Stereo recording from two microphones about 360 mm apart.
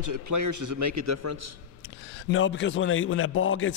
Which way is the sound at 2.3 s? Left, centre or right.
Left.